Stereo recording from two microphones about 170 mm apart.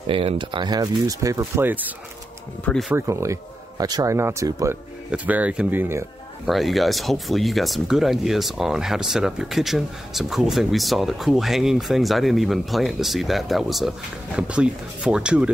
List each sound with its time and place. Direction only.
0.0 s speech: 30° right (ahead or behind); by 2.0 s 10° right (ahead or behind)
2.6 s speech: 5° left (ahead or behind)
2.9 s speech: 15° right (ahead or behind)
6.4 s speech: centre (ahead or behind)